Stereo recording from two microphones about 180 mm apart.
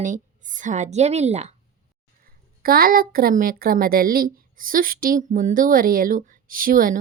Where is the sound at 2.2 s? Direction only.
55° right (ahead or behind).